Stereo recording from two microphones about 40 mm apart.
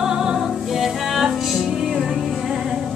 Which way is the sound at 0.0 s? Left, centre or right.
Centre.